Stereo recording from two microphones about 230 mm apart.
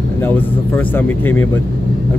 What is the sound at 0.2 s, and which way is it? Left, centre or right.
Speech, centre.